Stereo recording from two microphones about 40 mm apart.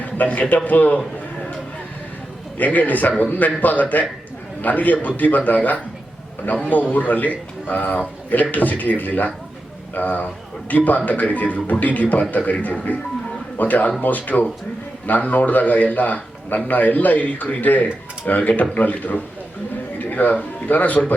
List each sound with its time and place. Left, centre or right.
0.0 s a man's voice: left
2.6 s a man's voice: left